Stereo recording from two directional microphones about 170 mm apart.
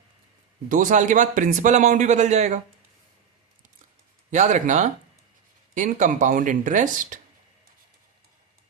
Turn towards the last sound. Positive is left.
turn(degrees=-50)  # may be behind; listen again after turning